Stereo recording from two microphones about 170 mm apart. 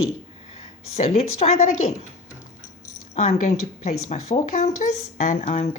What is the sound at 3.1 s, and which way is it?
Speech, 40° left (ahead or behind).